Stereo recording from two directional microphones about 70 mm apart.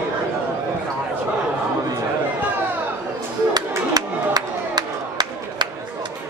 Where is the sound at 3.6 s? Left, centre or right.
Right.